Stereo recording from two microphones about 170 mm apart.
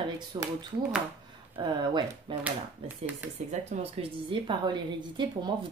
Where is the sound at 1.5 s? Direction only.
25° right (ahead or behind).